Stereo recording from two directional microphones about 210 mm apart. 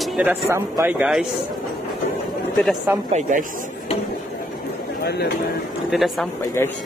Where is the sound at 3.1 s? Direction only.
35° right (ahead or behind).